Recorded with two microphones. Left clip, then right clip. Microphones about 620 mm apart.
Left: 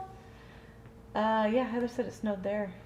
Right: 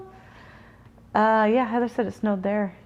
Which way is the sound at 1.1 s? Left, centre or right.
Right.